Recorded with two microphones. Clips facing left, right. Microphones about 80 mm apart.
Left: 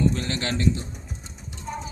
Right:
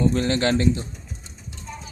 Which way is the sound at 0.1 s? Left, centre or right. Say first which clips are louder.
Right 7 dB; right.